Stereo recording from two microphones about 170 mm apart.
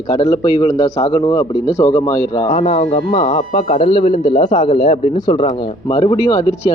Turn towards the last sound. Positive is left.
turn(degrees=35)  # may be behind; listen again after turning